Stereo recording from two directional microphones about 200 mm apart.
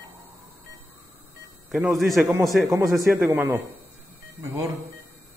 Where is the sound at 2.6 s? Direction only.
15° right (ahead or behind).